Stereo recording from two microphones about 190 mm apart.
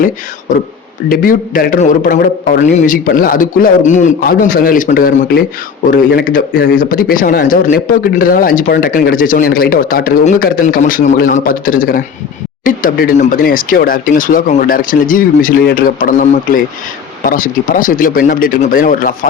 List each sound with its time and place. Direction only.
1.1 s a man's voice: 45° left (ahead or behind)